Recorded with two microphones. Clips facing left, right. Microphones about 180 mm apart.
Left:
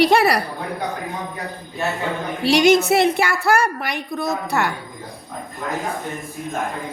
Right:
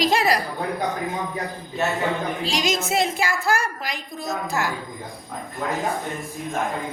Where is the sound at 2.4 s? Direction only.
65° left (ahead or behind).